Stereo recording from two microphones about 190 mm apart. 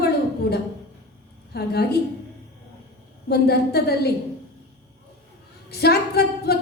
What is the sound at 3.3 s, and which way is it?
Speech, 55° left (ahead or behind).